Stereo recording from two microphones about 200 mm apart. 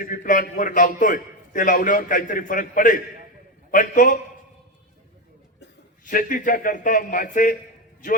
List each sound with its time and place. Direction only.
0.0 s a man's voice: 40° left (ahead or behind)
6.1 s speech: 45° left (ahead or behind)